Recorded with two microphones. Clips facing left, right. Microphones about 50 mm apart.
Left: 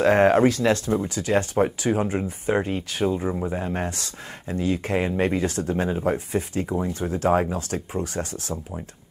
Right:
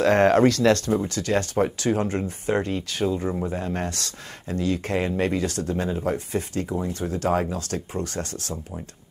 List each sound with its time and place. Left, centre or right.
0.0 s speech: centre